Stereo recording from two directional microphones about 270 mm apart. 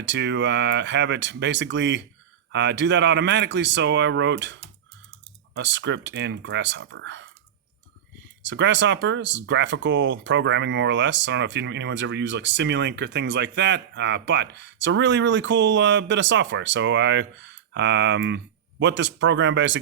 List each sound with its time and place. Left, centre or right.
0.0 s speech: right
8.4 s speech: right